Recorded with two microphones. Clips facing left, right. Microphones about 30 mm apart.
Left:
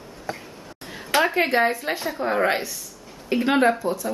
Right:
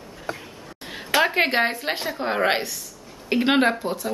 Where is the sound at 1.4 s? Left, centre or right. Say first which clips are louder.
Left 1 dB; right.